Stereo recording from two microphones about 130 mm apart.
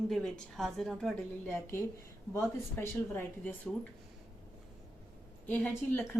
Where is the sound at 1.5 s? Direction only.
20° left (ahead or behind).